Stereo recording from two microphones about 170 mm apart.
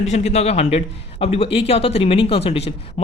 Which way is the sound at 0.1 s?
40° left (ahead or behind).